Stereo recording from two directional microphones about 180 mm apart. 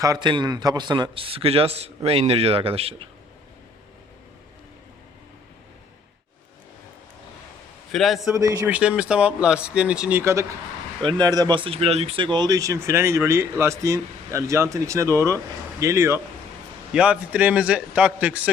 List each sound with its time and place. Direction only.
0.0 s a man's voice: 20° right (ahead or behind)
7.9 s speech: centre (ahead or behind)
8.4 s a man's voice: 20° right (ahead or behind)
8.7 s speech: 5° right (ahead or behind)